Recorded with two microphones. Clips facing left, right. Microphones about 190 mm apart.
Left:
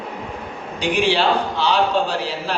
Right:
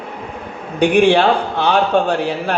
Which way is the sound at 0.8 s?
55° right (ahead or behind).